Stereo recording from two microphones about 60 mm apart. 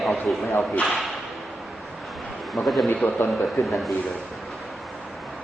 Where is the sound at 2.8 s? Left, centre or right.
Left.